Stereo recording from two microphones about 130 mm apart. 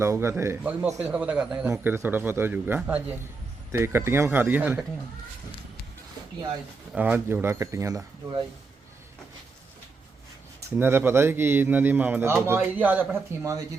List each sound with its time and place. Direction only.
0.0 s speech: 20° right (ahead or behind)
1.9 s speech: 15° right (ahead or behind)
6.9 s speech: 15° right (ahead or behind); by 8.4 s 30° right (ahead or behind)
10.8 s speech: 15° right (ahead or behind)